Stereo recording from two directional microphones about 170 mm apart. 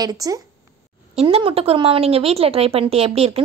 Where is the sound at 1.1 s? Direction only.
35° right (ahead or behind).